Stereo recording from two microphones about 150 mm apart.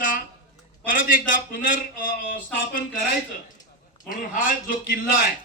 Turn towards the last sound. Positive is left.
turn(degrees=65)  # may be behind; listen again after turning